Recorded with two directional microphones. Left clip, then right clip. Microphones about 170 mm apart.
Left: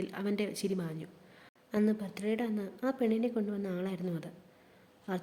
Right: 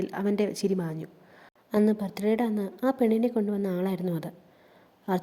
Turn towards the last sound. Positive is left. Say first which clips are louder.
# right 9 dB
turn(degrees=-30)  # may be behind; listen again after turning